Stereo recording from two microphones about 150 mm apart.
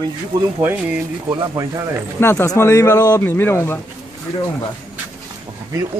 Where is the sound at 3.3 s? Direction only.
15° left (ahead or behind).